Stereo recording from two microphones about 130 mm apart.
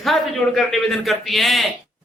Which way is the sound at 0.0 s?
Centre (ahead or behind).